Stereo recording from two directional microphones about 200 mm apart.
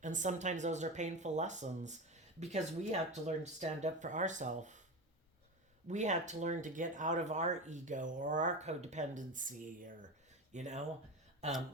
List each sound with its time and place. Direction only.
0.0 s speech: 40° right (ahead or behind)
5.9 s speech: 35° right (ahead or behind)